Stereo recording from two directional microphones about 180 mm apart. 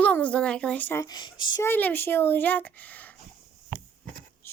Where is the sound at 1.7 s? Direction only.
10° left (ahead or behind).